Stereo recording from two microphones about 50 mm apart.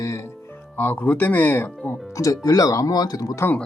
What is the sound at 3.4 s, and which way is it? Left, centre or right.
Speech, left.